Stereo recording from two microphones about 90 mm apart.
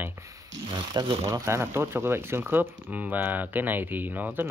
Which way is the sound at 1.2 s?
35° right (ahead or behind).